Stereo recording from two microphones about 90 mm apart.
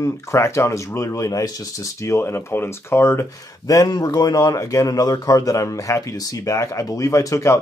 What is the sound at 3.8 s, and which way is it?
Speech, 45° left (ahead or behind).